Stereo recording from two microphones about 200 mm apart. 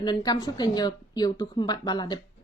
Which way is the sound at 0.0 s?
20° left (ahead or behind).